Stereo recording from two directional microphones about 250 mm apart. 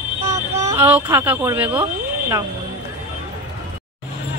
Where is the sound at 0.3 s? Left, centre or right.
Centre.